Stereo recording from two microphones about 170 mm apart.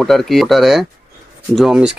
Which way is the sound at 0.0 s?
Centre (ahead or behind).